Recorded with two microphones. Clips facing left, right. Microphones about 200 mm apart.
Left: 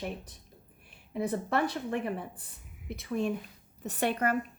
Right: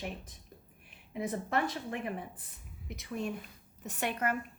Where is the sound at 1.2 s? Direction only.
35° left (ahead or behind).